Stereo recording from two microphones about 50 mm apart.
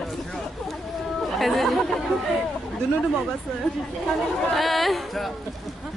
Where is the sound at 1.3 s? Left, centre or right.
Centre.